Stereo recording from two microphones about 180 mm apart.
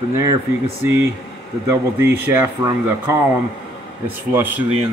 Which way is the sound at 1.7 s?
15° right (ahead or behind).